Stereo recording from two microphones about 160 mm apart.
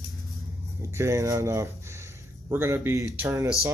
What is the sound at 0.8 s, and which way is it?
Speech, 15° right (ahead or behind).